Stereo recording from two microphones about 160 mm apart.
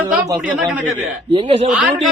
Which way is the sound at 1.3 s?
35° right (ahead or behind).